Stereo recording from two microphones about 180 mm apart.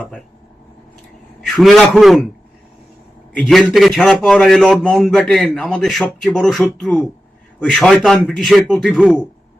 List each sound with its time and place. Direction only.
1.4 s a man's voice: centre (ahead or behind)
3.3 s a man's voice: 5° left (ahead or behind)